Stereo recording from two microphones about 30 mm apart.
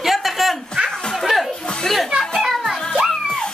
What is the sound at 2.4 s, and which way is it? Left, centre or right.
Music, centre.